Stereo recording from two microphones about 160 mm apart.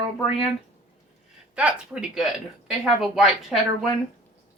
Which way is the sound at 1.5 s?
5° right (ahead or behind).